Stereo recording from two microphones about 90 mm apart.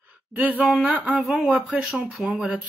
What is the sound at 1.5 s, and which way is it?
Speech, 15° right (ahead or behind).